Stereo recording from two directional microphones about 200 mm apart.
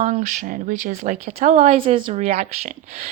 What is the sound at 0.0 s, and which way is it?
A woman's voice, 35° right (ahead or behind).